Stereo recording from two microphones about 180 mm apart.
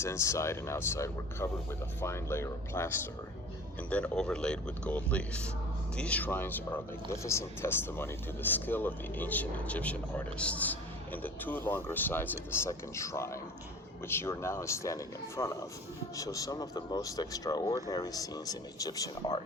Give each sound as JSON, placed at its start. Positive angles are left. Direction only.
{"t": 0.0, "sound": "speech", "side_deg": 15}